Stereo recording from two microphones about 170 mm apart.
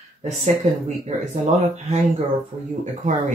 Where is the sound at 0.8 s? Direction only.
40° right (ahead or behind).